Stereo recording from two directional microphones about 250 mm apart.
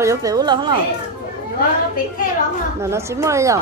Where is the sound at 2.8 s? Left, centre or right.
Centre.